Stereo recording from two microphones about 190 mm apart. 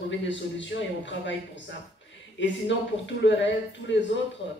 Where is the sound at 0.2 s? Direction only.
75° left (ahead or behind).